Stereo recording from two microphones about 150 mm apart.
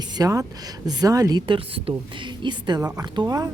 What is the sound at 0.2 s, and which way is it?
A woman's voice, 25° right (ahead or behind).